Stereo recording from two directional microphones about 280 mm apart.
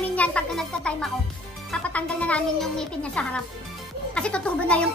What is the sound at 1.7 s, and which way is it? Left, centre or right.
A child's voice, centre.